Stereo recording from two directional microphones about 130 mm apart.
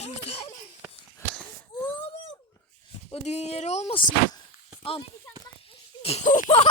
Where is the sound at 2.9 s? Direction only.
55° left (ahead or behind).